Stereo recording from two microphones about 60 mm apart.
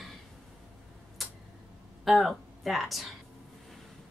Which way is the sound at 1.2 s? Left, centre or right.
Centre.